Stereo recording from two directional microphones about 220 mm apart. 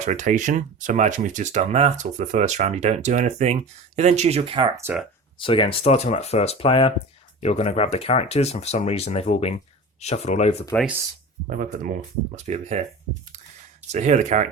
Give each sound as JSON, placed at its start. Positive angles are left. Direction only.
{"t": 0.0, "sound": "speech", "side_deg": -35}
{"t": 5.4, "sound": "speech", "side_deg": 25}
{"t": 11.4, "sound": "speech", "side_deg": -40}
{"t": 13.9, "sound": "speech", "side_deg": -30}